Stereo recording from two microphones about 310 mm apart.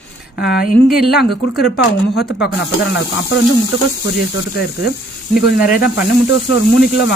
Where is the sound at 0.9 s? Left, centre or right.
Centre.